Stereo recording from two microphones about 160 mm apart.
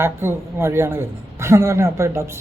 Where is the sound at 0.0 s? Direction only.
15° right (ahead or behind).